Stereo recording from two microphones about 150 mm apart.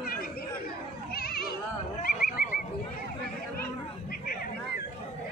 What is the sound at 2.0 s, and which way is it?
Neigh, 80° left.